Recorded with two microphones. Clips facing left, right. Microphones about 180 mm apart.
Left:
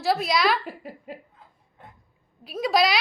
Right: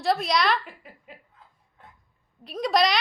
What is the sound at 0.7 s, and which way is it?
Speech, 40° left (ahead or behind).